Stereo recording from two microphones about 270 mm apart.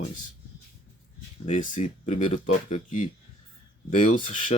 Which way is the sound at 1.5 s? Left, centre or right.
Left.